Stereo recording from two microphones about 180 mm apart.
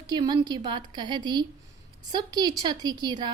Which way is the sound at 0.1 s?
25° right (ahead or behind).